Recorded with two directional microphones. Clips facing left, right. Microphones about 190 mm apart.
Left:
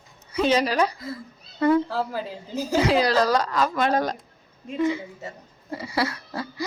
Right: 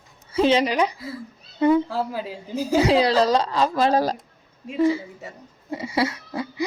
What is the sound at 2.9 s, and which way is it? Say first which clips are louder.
Speech: right 2 dB; 25° right (ahead or behind).